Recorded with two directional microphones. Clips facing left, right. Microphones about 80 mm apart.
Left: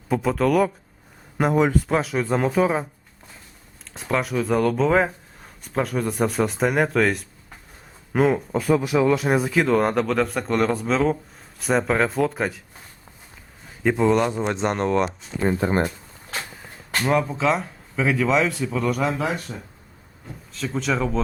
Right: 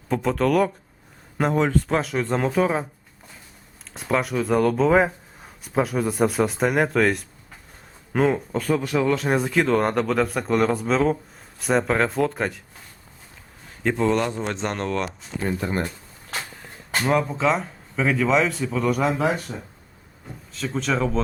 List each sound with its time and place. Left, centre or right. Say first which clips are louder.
0.1 s speech: left 1 dB; centre
3.8 s speech: right 1 dB; centre
13.8 s speech: left 2 dB; centre
15.4 s speech: left 4 dB; left
17.1 s speech: even; centre